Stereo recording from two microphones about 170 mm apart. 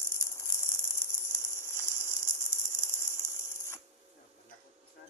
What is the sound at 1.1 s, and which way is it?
Rattle, 15° left (ahead or behind).